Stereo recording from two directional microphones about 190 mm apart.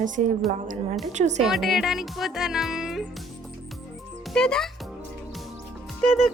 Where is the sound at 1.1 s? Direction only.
35° right (ahead or behind).